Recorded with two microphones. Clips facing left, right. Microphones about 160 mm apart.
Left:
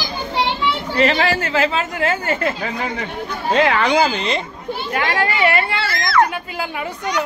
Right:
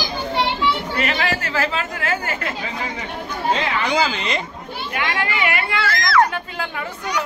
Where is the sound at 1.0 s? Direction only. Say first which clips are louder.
Left 9 dB; 30° left (ahead or behind).